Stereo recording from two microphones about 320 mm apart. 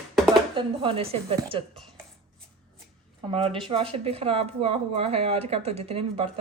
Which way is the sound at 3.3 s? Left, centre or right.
Centre.